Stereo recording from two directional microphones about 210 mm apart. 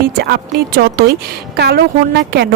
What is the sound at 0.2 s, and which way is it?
Speech, 50° right (ahead or behind).